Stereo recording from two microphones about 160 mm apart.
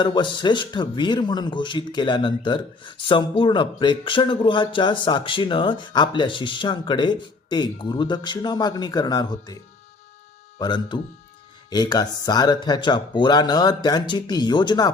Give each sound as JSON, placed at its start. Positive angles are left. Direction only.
{"t": 0.0, "sound": "a man's voice", "side_deg": 30}
{"t": 10.6, "sound": "a man's voice", "side_deg": 30}